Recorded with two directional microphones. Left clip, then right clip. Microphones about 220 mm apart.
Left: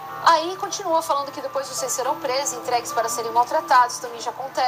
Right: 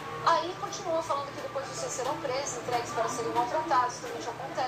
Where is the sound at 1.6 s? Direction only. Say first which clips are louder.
Left 9 dB; 45° left (ahead or behind).